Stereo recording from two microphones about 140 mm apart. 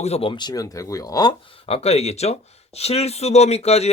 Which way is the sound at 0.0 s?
45° left (ahead or behind).